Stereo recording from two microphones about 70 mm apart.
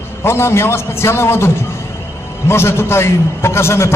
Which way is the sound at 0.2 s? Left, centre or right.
Left.